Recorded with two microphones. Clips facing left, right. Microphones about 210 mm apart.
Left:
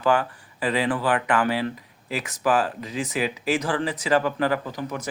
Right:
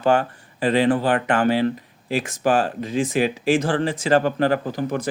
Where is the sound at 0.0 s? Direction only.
25° right (ahead or behind).